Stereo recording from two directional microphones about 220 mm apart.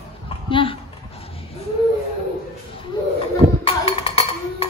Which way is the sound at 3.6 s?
25° left (ahead or behind).